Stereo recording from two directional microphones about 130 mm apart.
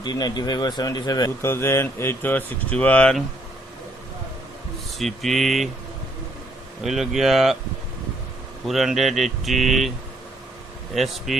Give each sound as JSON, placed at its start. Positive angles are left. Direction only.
{"t": 0.0, "sound": "speech", "side_deg": 30}
{"t": 1.4, "sound": "speech", "side_deg": 20}
{"t": 4.9, "sound": "speech", "side_deg": 0}
{"t": 6.8, "sound": "speech", "side_deg": 0}
{"t": 8.6, "sound": "speech", "side_deg": 0}
{"t": 10.9, "sound": "speech", "side_deg": 0}